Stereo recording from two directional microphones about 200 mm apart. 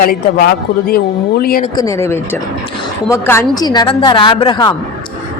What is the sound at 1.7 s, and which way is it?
A woman's voice, 20° left (ahead or behind).